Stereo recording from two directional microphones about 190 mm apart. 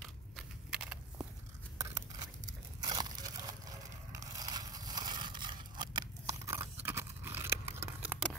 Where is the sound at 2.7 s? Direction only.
20° right (ahead or behind).